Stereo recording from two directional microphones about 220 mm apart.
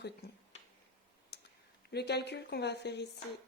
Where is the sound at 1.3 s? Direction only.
50° left (ahead or behind).